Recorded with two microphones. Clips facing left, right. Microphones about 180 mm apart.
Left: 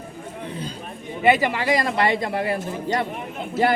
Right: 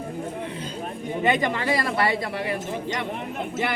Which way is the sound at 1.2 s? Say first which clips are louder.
Left 4 dB; 10° left (ahead or behind).